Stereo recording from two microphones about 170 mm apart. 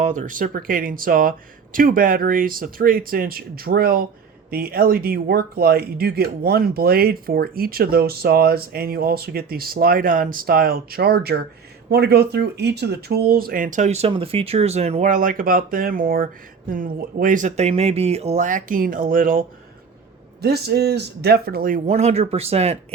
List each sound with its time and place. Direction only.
0.0 s speech: 50° right (ahead or behind)
20.4 s speech: 70° right (ahead or behind); by 22.8 s 35° right (ahead or behind)